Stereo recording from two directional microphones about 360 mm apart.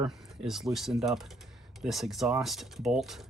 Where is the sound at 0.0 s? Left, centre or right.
Centre.